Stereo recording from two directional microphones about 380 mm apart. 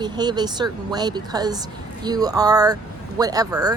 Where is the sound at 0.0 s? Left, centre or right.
Centre.